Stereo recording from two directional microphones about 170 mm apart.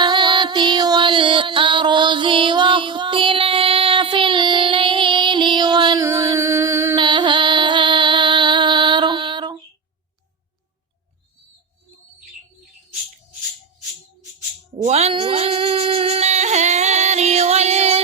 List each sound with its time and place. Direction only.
0.0 s music: 25° right (ahead or behind)
6.9 s music: 25° right (ahead or behind)
14.8 s a sound: 40° right (ahead or behind)